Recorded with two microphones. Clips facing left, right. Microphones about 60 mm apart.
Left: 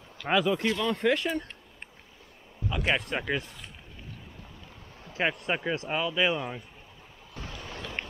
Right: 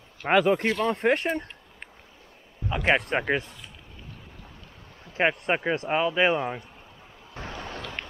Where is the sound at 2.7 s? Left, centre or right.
Right.